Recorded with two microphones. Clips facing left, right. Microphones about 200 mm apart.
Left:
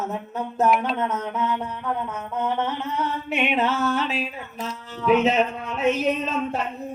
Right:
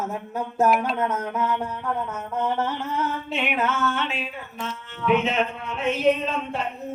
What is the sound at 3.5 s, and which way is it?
Music, 30° left (ahead or behind).